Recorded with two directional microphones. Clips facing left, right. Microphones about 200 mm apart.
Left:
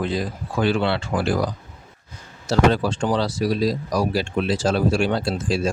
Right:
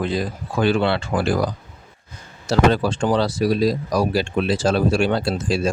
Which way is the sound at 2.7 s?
60° right (ahead or behind).